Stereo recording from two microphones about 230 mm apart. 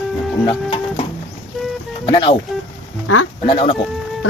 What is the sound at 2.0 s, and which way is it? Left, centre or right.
Speech, centre.